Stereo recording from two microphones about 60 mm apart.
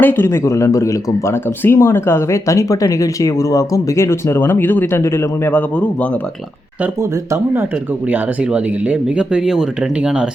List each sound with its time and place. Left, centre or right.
0.0 s speech: left
1.3 s speech: left
4.4 s speech: left
5.5 s a man's voice: left
7.0 s speech: right
8.0 s speech: right